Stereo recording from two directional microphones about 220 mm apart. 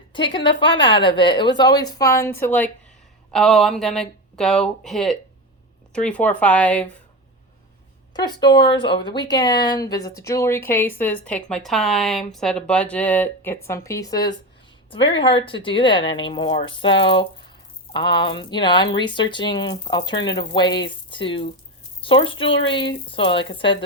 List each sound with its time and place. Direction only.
0.1 s speech: 20° left (ahead or behind); by 6.8 s 5° left (ahead or behind)
8.1 s speech: 20° left (ahead or behind)